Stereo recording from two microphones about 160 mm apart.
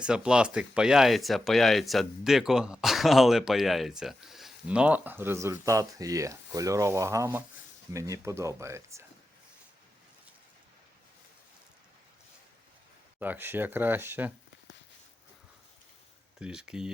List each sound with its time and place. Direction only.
0.0 s speech: 5° right (ahead or behind)
13.1 s speech: 10° right (ahead or behind)
16.4 s speech: 5° right (ahead or behind)